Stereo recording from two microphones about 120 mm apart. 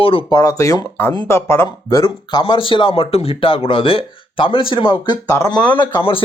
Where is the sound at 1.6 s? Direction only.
35° left (ahead or behind).